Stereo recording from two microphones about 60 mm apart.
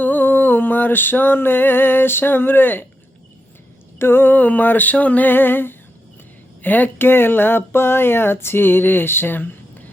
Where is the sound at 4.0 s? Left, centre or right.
Left.